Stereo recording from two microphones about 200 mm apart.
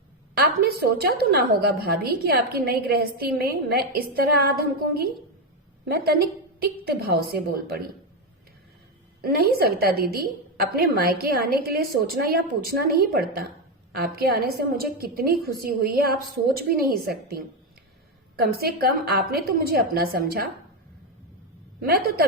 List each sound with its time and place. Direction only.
0.3 s a woman's voice: 50° right (ahead or behind)
9.2 s a woman's voice: 50° right (ahead or behind)
21.8 s a woman's voice: 50° right (ahead or behind)